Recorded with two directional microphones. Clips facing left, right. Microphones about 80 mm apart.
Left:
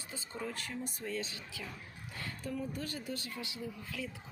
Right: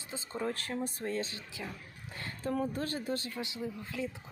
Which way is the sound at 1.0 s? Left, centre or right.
Right.